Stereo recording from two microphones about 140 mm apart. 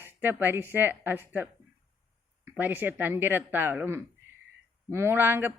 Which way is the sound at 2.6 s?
15° right (ahead or behind).